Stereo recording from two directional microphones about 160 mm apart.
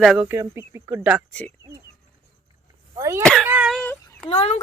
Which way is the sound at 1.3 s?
10° left (ahead or behind).